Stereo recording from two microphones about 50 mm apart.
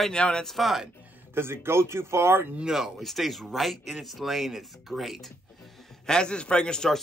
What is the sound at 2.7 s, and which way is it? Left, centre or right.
Speech, centre.